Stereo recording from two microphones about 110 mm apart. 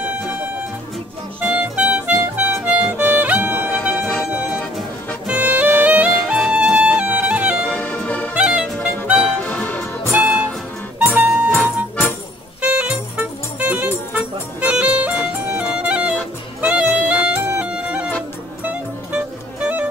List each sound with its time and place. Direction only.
1.4 s music: 10° right (ahead or behind)
4.1 s music: centre (ahead or behind)
5.2 s music: 10° right (ahead or behind)
7.6 s music: 10° left (ahead or behind)
8.4 s music: 10° right (ahead or behind)
9.4 s music: 15° left (ahead or behind)
11.1 s music: 10° right (ahead or behind)
11.5 s music: 20° left (ahead or behind)
12.6 s music: 10° right (ahead or behind)
19.6 s music: 10° right (ahead or behind)